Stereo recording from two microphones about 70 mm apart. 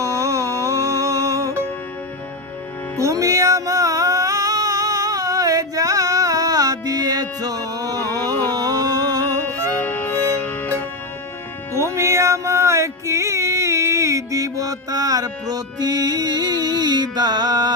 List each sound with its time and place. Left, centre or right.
0.0 s music: right
3.0 s music: right
8.5 s a sound: right
9.7 s music: left
11.7 s music: right